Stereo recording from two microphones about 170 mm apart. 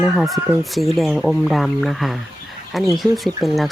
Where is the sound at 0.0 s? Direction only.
Centre (ahead or behind).